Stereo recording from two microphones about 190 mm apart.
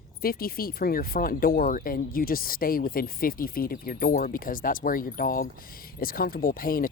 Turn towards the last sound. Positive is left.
turn(degrees=50)  # may be behind; listen again after turning